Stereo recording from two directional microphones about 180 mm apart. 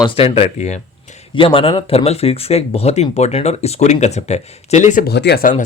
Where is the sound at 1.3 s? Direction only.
30° left (ahead or behind).